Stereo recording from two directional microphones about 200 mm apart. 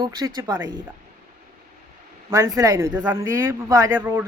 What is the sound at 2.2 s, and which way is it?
Speech, 15° right (ahead or behind).